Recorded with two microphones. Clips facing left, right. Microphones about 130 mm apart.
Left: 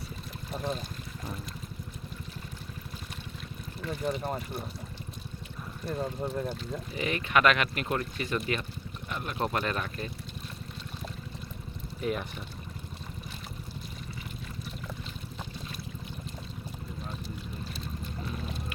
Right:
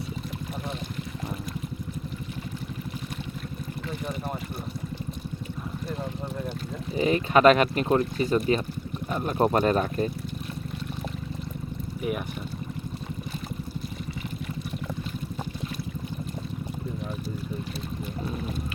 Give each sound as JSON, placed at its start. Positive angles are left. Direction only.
{"t": 6.9, "sound": "speech", "side_deg": -30}
{"t": 12.0, "sound": "speech", "side_deg": -10}